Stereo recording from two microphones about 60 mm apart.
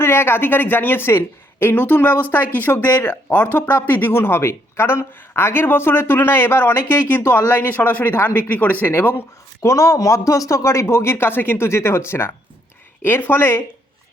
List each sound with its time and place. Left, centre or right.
0.0 s speech: left
9.6 s a man's voice: left